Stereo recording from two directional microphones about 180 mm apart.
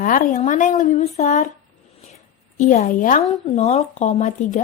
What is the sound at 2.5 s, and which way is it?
Speech, 40° left (ahead or behind).